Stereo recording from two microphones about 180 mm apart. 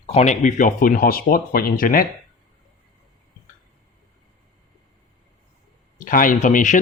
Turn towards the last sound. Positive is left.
turn(degrees=45)  # may be behind; listen again after turning